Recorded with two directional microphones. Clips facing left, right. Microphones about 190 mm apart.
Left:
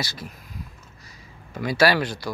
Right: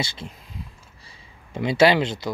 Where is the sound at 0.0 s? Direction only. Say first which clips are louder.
Right 2 dB; 25° right (ahead or behind).